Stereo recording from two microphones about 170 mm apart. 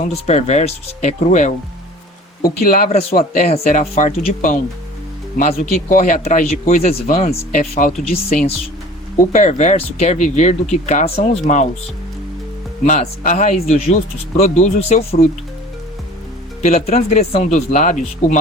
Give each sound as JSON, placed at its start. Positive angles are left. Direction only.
{"t": 0.0, "sound": "speech", "side_deg": 40}
{"t": 2.4, "sound": "speech", "side_deg": 55}
{"t": 3.4, "sound": "speech", "side_deg": 40}
{"t": 12.8, "sound": "speech", "side_deg": 45}
{"t": 16.6, "sound": "speech", "side_deg": 40}